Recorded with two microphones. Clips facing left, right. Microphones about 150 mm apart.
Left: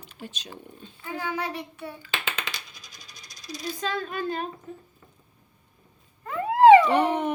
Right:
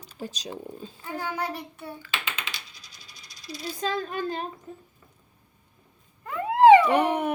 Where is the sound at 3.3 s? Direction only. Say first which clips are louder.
Left 2 dB; 45° left (ahead or behind).